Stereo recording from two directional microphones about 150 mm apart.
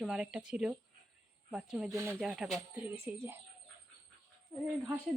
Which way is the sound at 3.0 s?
20° right (ahead or behind).